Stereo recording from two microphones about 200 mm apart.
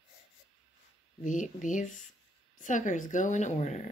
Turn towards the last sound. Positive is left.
turn(degrees=35)  # may be behind; listen again after turning